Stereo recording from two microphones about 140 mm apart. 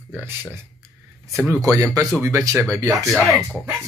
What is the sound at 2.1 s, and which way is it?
Speech, 20° right (ahead or behind).